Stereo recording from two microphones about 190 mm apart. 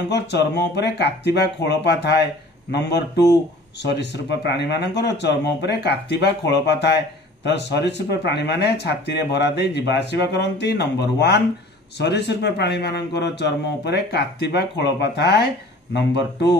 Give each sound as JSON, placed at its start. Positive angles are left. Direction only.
{"t": 0.1, "sound": "speech", "side_deg": 65}